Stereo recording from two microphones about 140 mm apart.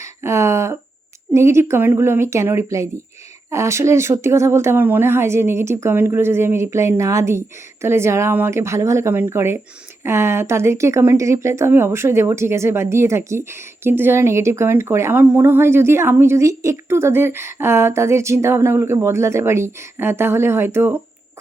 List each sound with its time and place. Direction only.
0.0 s speech: 20° right (ahead or behind)